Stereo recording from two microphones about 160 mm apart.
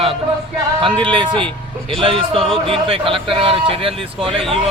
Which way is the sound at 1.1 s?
30° right (ahead or behind).